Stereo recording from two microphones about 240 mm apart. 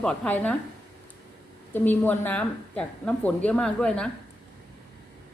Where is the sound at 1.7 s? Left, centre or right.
Centre.